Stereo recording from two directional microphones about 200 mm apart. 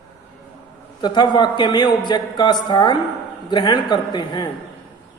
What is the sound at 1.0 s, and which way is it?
A man's voice, 20° left (ahead or behind).